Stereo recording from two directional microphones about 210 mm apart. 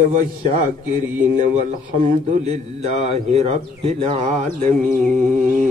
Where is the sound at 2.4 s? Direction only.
30° right (ahead or behind).